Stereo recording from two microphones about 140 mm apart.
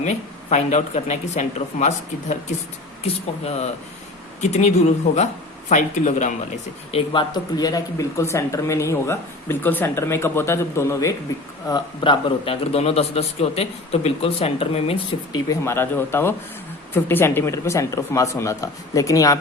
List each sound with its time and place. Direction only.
0.0 s speech: 60° left (ahead or behind)
3.0 s a man's voice: 50° left (ahead or behind)
6.9 s speech: 35° left (ahead or behind)
11.7 s a man's voice: 35° left (ahead or behind)
15.3 s speech: 20° left (ahead or behind)